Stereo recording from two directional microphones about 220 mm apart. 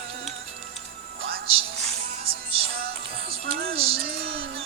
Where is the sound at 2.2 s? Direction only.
25° right (ahead or behind).